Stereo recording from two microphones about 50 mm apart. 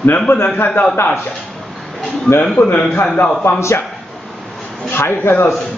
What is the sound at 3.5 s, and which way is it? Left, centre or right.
Speech, left.